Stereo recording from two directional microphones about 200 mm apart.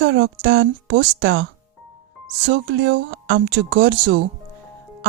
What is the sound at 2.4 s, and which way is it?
A woman's voice, 70° right (ahead or behind).